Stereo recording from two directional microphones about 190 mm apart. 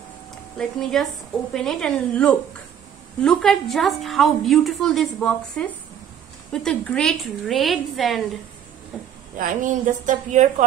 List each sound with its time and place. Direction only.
0.6 s a woman's voice: centre (ahead or behind)
9.4 s a woman's voice: 40° right (ahead or behind)